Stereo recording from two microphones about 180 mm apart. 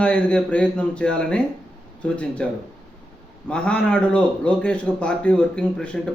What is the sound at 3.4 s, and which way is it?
A man's voice, 5° left (ahead or behind).